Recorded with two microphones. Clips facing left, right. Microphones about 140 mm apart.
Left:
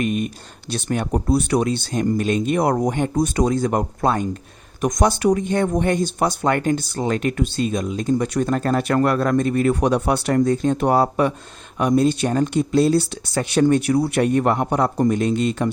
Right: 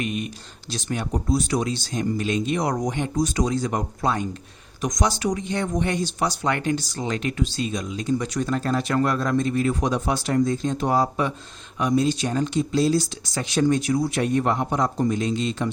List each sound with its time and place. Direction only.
0.0 s speech: 50° left (ahead or behind)